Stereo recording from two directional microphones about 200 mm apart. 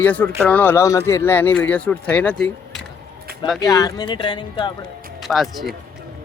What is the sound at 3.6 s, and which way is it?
Speech, 20° left (ahead or behind).